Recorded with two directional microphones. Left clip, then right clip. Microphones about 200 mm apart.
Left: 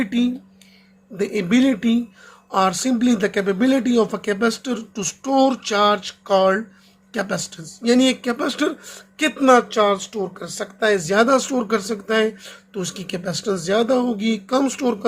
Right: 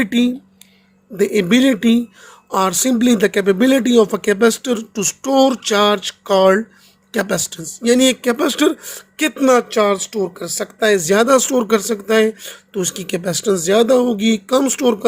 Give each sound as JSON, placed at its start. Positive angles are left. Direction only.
{"t": 0.0, "sound": "speech", "side_deg": -45}